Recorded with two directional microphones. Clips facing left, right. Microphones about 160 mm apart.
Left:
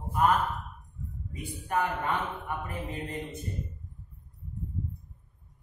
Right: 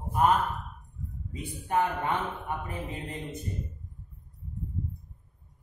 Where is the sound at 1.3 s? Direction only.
20° right (ahead or behind).